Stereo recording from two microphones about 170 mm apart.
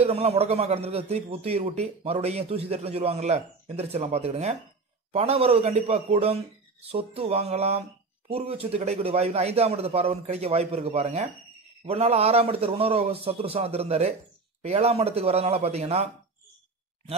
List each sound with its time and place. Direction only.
0.0 s a man's voice: 35° right (ahead or behind)